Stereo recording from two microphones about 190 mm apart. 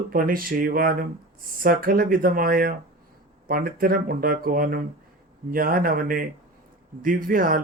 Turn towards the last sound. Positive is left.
turn(degrees=-45)  # may be behind; listen again after turning